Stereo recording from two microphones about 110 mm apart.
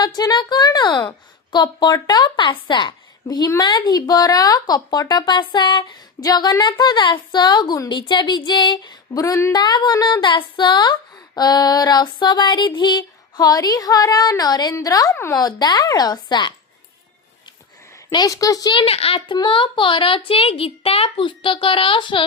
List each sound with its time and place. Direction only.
0.0 s a woman's voice: 40° left (ahead or behind)
18.1 s a woman's voice: 35° left (ahead or behind)
18.9 s a child's voice: 60° left (ahead or behind)
19.3 s a woman's voice: 50° left (ahead or behind)